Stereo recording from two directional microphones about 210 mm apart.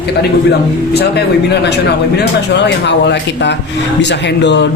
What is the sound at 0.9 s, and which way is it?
Speech, 50° left (ahead or behind).